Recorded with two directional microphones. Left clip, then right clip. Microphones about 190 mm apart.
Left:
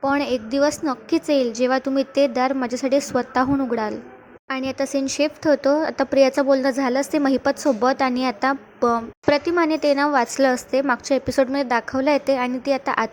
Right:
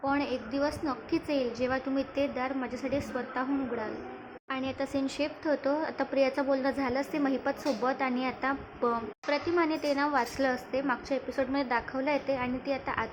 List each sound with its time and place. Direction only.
0.0 s speech: 35° left (ahead or behind)